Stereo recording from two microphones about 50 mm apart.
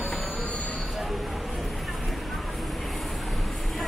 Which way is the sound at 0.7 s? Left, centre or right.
Centre.